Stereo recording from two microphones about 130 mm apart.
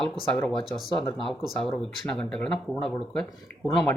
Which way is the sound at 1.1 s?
Centre (ahead or behind).